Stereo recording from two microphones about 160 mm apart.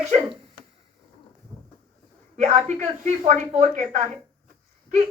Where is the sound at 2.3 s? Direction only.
45° right (ahead or behind).